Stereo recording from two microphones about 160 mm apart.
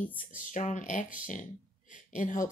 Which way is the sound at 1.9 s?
55° left (ahead or behind).